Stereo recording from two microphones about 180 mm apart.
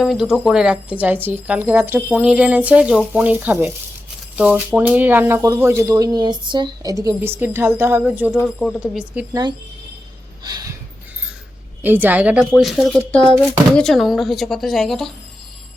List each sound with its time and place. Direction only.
0.0 s speech: 5° right (ahead or behind)
9.3 s a sound: 25° right (ahead or behind)
11.8 s speech: 10° right (ahead or behind)